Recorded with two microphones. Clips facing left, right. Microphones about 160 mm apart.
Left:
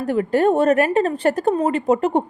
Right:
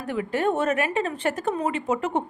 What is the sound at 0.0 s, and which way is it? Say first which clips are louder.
A woman's voice: left 7 dB; 40° left (ahead or behind).